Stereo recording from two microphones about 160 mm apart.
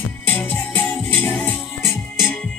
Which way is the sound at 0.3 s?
10° left (ahead or behind).